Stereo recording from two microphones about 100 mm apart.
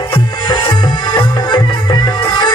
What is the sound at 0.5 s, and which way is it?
Music, 55° left (ahead or behind).